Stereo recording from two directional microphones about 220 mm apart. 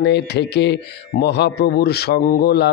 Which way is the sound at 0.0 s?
50° left (ahead or behind).